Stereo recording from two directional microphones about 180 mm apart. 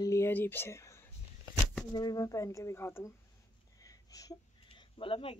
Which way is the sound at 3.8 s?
20° left (ahead or behind).